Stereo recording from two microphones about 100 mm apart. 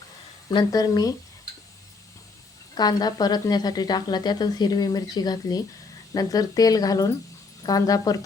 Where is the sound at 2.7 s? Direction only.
45° left (ahead or behind).